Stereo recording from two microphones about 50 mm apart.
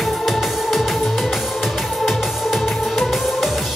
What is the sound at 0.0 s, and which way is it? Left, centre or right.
Music, centre.